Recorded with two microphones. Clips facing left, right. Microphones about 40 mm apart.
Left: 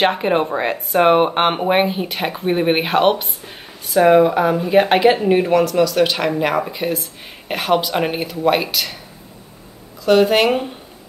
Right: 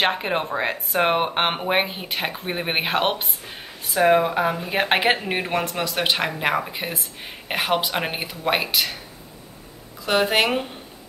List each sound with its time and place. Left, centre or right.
0.0 s speech: centre
5.5 s speech: right
6.4 s speech: centre
10.0 s speech: centre